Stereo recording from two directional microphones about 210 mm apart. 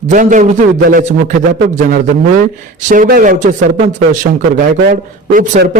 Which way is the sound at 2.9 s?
40° right (ahead or behind).